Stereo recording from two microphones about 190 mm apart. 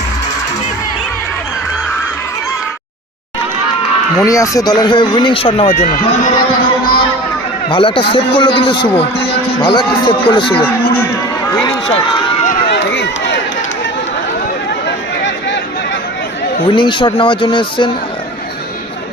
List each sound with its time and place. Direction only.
4.2 s speech: 15° left (ahead or behind)
7.7 s speech: 25° left (ahead or behind)
11.6 s run: 25° left (ahead or behind)
12.6 s a sound: 65° left (ahead or behind)
16.6 s speech: 25° left (ahead or behind)